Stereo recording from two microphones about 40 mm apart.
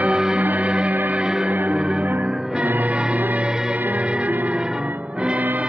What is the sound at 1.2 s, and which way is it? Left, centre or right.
Music, right.